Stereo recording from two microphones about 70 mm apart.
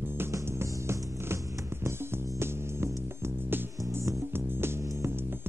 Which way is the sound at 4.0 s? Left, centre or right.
Right.